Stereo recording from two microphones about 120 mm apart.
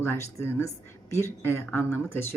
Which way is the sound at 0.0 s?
20° left (ahead or behind).